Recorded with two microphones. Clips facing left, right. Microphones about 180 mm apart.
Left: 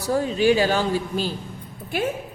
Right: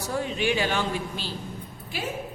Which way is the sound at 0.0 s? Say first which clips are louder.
Left 7 dB; 35° left (ahead or behind).